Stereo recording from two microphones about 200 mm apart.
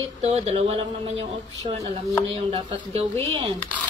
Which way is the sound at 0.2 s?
30° right (ahead or behind).